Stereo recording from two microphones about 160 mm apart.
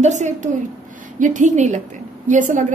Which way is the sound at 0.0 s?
45° right (ahead or behind).